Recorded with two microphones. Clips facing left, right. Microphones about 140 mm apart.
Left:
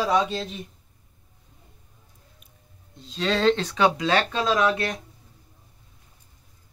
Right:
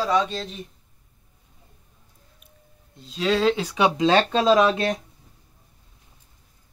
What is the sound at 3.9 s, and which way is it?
Speech, 25° right (ahead or behind).